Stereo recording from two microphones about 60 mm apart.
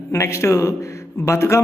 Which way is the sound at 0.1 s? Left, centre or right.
Left.